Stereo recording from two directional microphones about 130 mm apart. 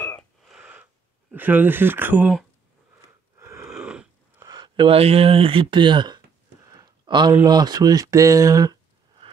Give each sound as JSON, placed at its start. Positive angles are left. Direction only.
{"t": 0.4, "sound": "frog", "side_deg": -5}
{"t": 1.3, "sound": "speech", "side_deg": -15}
{"t": 3.3, "sound": "wheeze", "side_deg": -20}
{"t": 3.6, "sound": "wheeze", "side_deg": -5}
{"t": 4.4, "sound": "speech", "side_deg": -35}
{"t": 6.6, "sound": "a sound", "side_deg": -25}
{"t": 7.4, "sound": "speech", "side_deg": -30}
{"t": 9.2, "sound": "a sound", "side_deg": -40}